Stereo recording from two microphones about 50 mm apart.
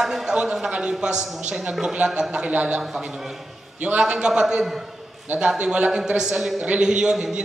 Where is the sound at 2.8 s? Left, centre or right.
Centre.